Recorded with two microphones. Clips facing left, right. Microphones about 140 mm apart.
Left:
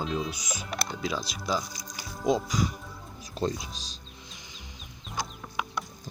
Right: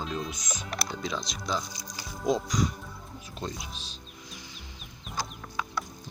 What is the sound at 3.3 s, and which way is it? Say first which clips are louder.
Speech: left 7 dB; 35° left (ahead or behind).